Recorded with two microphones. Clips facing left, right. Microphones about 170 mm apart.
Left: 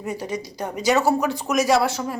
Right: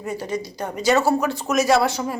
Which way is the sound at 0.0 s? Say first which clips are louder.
Right 1 dB; 15° left (ahead or behind).